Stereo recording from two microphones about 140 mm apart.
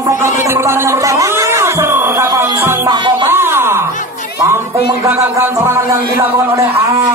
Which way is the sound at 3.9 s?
65° left (ahead or behind).